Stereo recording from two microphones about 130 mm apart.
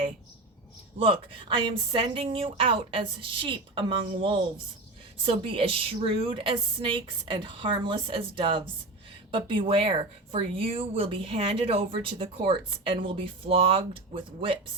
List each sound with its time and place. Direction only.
0.9 s speech: 45° right (ahead or behind)